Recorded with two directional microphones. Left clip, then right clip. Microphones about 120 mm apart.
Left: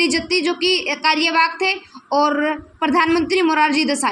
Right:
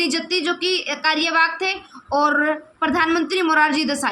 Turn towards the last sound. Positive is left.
turn(degrees=20)  # may be behind; listen again after turning